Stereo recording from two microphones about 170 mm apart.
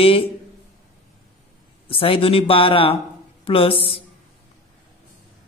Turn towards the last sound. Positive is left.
turn(degrees=35)  # may be behind; listen again after turning